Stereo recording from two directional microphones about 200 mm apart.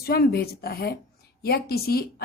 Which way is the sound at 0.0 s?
50° left (ahead or behind).